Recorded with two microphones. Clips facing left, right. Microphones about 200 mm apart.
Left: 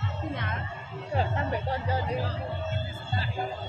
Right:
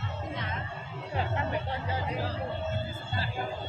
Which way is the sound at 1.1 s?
35° left (ahead or behind).